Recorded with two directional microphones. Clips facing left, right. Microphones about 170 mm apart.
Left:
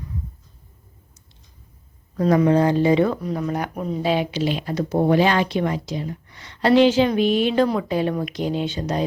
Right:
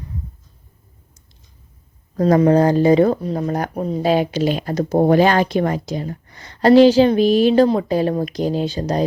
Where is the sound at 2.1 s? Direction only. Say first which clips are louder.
Right 3 dB; 40° right (ahead or behind).